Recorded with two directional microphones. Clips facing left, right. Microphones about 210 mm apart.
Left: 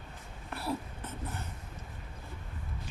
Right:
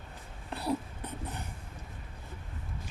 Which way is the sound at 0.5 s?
20° right (ahead or behind).